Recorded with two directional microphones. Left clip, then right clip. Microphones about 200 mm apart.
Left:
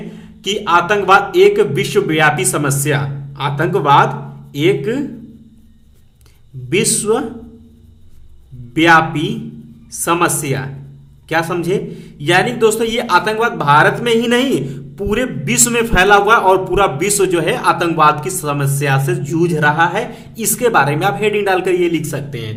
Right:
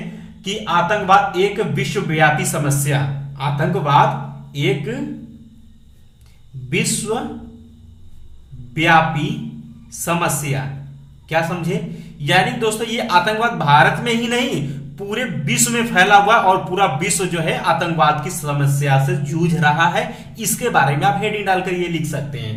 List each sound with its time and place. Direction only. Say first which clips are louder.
0.4 s a man's voice: left 4 dB; 45° left (ahead or behind)
6.7 s a man's voice: left 6 dB; 40° left (ahead or behind)
8.7 s a man's voice: left 4 dB; 40° left (ahead or behind)